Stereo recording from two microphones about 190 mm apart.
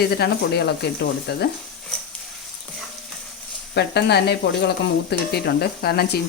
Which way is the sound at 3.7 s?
60° left (ahead or behind).